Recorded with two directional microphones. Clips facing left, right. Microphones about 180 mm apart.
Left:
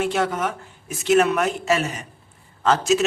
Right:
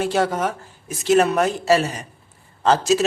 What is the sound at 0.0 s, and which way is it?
Speech, 35° right (ahead or behind).